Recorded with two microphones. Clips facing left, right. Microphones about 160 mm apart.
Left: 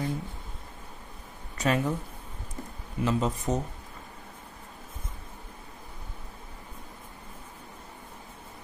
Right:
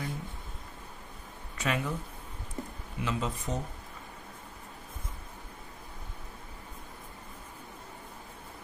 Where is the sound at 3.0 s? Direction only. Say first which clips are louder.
Left 6 dB; 40° left (ahead or behind).